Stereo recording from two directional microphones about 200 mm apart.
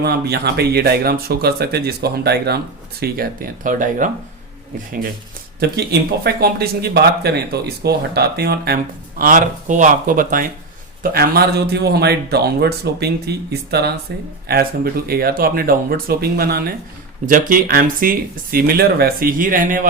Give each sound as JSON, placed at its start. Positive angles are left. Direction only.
{"t": 0.0, "sound": "speech", "side_deg": -55}
{"t": 5.5, "sound": "speech", "side_deg": -55}